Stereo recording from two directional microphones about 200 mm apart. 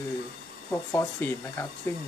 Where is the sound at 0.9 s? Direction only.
10° left (ahead or behind).